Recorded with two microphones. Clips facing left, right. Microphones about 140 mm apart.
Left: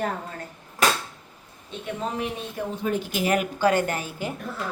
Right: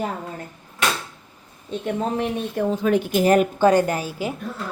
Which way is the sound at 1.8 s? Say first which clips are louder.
Right 5 dB; 45° right (ahead or behind).